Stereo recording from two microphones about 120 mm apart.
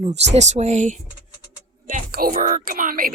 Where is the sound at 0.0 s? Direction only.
70° right (ahead or behind); by 1.0 s 85° right.